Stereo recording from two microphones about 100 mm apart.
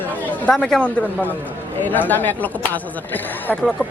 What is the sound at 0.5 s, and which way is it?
Speech, 10° left (ahead or behind).